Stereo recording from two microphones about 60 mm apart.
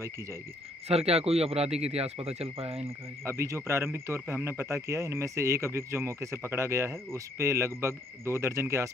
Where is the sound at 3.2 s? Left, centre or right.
Right.